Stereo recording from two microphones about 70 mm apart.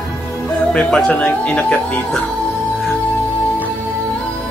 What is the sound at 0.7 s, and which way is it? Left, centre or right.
Speech, centre.